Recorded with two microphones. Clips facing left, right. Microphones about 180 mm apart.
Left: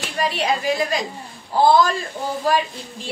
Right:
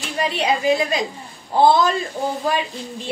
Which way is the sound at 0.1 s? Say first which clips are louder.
Right 1 dB; 20° right (ahead or behind).